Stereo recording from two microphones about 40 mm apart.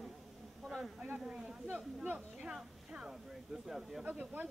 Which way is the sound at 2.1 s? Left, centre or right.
Right.